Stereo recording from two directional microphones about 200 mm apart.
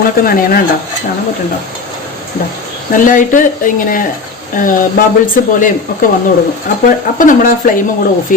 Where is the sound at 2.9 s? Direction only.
40° left (ahead or behind).